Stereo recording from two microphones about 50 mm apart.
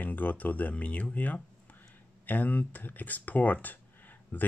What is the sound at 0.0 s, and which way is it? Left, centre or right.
Speech, left.